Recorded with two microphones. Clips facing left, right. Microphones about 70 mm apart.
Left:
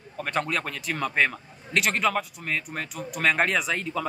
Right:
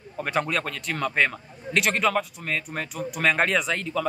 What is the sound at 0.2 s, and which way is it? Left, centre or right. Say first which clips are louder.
A man's voice: right 2 dB; centre.